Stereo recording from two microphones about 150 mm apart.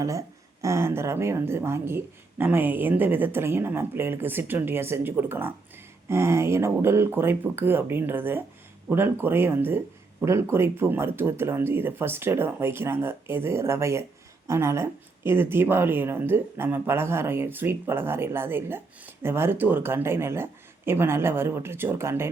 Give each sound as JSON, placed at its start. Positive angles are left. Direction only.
{"t": 0.0, "sound": "speech", "side_deg": -20}